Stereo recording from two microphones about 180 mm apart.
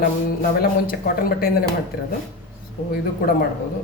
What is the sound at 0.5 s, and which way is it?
A woman's voice, 55° left (ahead or behind).